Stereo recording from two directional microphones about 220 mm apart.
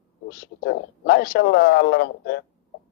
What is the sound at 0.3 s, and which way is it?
Speech, 45° left (ahead or behind).